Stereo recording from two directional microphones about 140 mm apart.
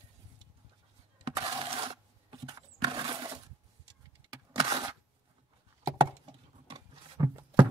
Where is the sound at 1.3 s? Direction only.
35° right (ahead or behind).